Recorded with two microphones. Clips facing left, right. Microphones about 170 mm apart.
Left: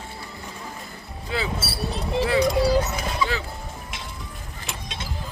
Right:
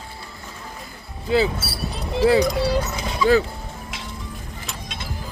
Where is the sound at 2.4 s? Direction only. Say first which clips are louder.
Left 1 dB; 10° left (ahead or behind).